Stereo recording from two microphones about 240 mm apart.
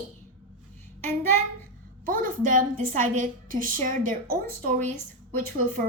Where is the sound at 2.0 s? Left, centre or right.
Right.